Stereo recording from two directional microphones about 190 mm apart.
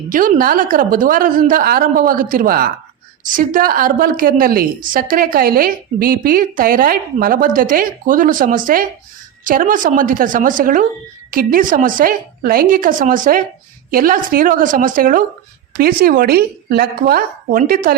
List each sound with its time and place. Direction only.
0.1 s a woman's voice: 45° right (ahead or behind)